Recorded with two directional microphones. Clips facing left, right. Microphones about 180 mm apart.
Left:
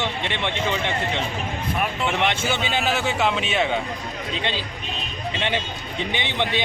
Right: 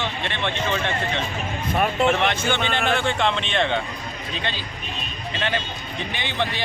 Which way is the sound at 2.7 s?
5° left (ahead or behind).